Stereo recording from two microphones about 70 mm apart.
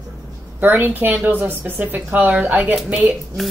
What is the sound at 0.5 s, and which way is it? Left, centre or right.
A woman's voice, right.